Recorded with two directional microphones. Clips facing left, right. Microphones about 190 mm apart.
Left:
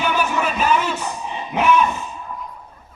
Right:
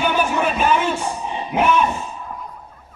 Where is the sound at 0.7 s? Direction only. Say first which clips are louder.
Right 1 dB; 25° right (ahead or behind).